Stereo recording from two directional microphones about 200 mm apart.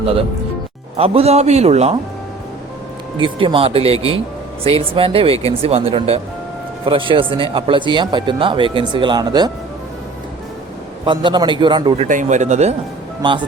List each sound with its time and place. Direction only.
0.9 s a man's voice: 30° right (ahead or behind)
3.2 s speech: 25° right (ahead or behind)
11.0 s speech: 25° right (ahead or behind)
12.0 s a man's voice: 40° right (ahead or behind)